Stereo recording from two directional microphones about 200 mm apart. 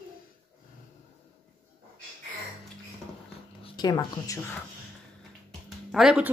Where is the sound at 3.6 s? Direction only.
20° left (ahead or behind).